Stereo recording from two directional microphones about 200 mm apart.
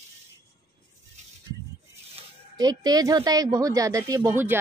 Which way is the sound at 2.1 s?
20° right (ahead or behind).